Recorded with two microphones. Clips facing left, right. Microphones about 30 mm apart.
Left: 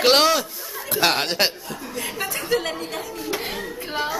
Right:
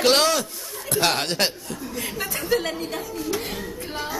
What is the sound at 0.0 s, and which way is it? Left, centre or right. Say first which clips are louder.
Speech: left 2 dB; centre.